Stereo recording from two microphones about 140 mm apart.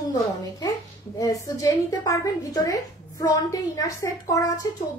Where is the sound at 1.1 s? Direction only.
25° left (ahead or behind).